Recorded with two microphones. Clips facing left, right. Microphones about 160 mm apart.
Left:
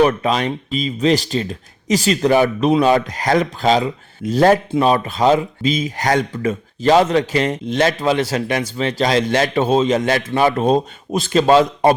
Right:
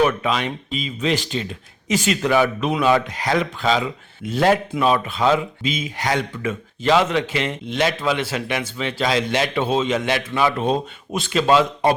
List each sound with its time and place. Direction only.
0.0 s speech: 35° left (ahead or behind)